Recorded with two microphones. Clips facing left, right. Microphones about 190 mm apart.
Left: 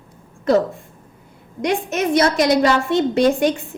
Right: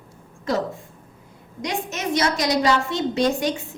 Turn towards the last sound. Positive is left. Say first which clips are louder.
# left 5 dB
turn(degrees=55)  # may be behind; listen again after turning